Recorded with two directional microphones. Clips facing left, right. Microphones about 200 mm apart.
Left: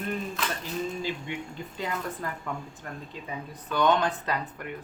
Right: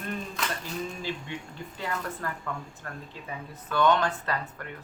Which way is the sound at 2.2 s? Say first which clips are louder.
Even; 15° left (ahead or behind).